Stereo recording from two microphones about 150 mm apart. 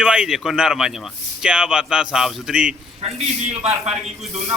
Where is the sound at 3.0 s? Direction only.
45° right (ahead or behind).